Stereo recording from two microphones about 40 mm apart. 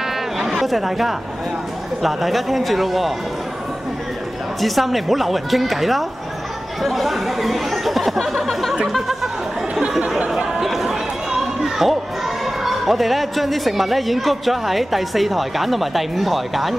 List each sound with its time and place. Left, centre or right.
0.4 s speech: centre
4.6 s speech: centre
8.8 s chatter: centre
9.8 s a sound: centre
10.3 s chatter: centre
12.6 s speech: centre